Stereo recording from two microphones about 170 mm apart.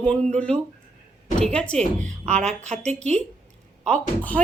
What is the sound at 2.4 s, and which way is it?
Speech, 40° right (ahead or behind).